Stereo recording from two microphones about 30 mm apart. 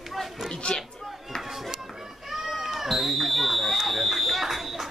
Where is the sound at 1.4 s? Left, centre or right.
Centre.